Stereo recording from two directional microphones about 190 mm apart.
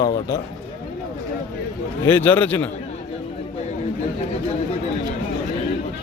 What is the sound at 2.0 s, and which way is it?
Speech, 10° left (ahead or behind).